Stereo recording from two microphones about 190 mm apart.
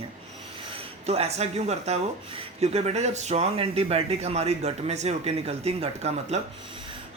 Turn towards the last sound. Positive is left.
turn(degrees=-35)  # may be behind; listen again after turning